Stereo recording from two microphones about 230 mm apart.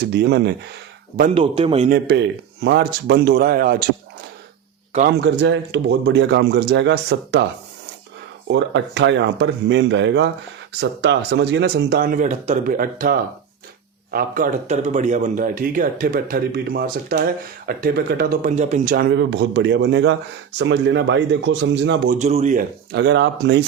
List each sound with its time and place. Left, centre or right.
0.1 s speech: right
1.3 s a man's voice: right
1.9 s speech: right
4.9 s speech: right
8.4 s a man's voice: right
18.9 s speech: right
22.2 s speech: right